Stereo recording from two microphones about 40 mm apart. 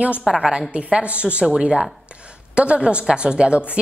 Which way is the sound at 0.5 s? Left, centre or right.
Right.